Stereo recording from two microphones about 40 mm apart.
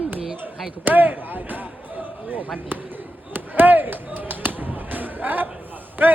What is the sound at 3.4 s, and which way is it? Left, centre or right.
Basketball bounce, right.